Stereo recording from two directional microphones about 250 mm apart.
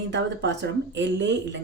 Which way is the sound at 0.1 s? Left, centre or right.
Right.